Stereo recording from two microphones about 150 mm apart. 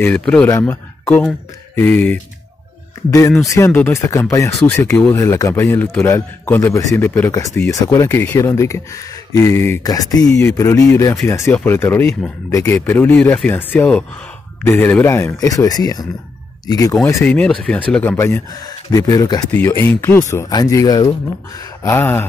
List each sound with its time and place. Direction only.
0.0 s speech: 10° left (ahead or behind)
3.1 s speech: 20° left (ahead or behind)
17.2 s speech: 10° left (ahead or behind); by 19.4 s 25° left (ahead or behind)
19.5 s speech: 15° left (ahead or behind)